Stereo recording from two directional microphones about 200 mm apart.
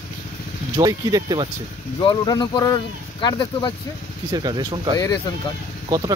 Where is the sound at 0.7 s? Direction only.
20° right (ahead or behind).